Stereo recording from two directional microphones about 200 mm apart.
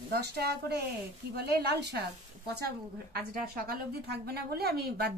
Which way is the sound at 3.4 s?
45° right (ahead or behind).